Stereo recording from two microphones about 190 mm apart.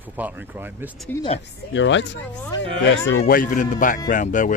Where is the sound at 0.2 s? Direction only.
10° right (ahead or behind).